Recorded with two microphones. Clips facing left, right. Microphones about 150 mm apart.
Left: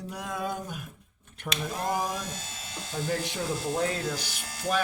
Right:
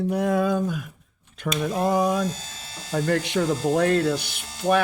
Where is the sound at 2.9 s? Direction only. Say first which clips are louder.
Right 8 dB; 75° right (ahead or behind).